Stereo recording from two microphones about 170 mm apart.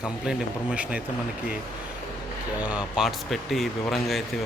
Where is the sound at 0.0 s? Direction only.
5° right (ahead or behind).